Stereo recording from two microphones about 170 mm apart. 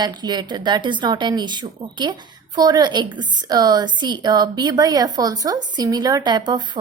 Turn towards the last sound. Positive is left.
turn(degrees=-25)  # may be behind; listen again after turning